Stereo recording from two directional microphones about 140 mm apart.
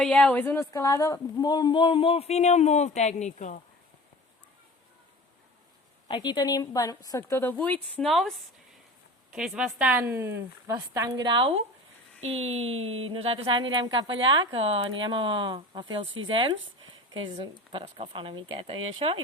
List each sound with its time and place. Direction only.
0.0 s speech: 10° left (ahead or behind); by 3.6 s 60° left (ahead or behind)
6.1 s a woman's voice: 35° left (ahead or behind); by 11.3 s 25° right (ahead or behind)
11.3 s a woman's voice: 35° right (ahead or behind)